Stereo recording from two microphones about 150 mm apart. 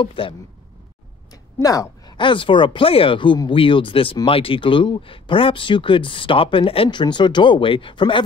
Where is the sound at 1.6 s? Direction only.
25° left (ahead or behind).